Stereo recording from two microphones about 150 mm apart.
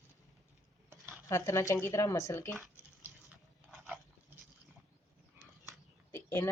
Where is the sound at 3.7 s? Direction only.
10° right (ahead or behind).